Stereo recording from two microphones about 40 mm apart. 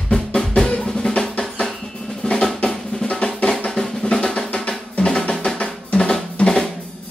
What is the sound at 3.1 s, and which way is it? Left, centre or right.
Drum, left.